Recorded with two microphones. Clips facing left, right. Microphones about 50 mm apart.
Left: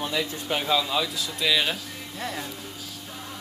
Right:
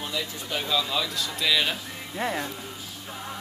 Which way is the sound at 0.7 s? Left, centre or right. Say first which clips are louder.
Left 1 dB; centre.